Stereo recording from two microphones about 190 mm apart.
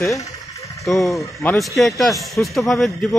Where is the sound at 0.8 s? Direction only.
Centre (ahead or behind).